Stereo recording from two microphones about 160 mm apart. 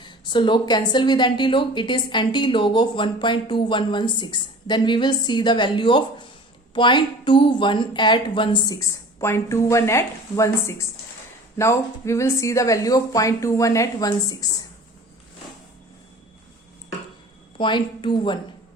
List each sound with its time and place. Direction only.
0.0 s a woman's voice: 30° left (ahead or behind)
17.6 s a woman's voice: 30° left (ahead or behind)